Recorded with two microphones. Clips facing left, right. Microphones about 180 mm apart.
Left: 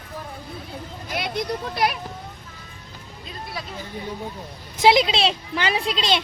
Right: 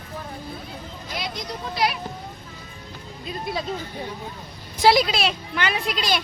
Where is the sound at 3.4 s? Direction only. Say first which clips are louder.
Right 6 dB; 25° right (ahead or behind).